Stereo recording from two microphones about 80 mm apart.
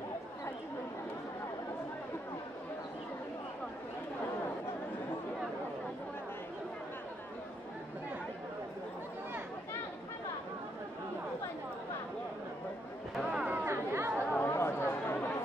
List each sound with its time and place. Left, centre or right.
13.1 s a sound: centre
13.5 s chatter: right
14.4 s chatter: left